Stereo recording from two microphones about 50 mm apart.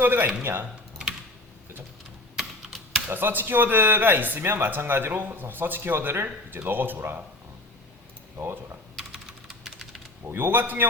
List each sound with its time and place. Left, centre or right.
0.0 s speech: right
2.3 s computer keyboard: centre
3.1 s speech: right
9.6 s typing: centre
10.3 s a man's voice: right